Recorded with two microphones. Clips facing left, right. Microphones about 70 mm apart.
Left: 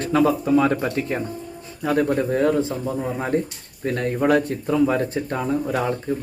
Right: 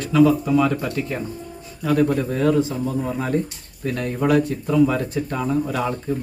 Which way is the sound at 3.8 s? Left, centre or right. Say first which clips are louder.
Left 1 dB; left.